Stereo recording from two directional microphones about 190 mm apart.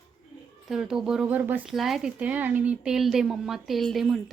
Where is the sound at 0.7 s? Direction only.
Centre (ahead or behind).